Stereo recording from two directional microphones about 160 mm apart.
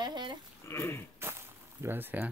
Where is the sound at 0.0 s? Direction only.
30° right (ahead or behind).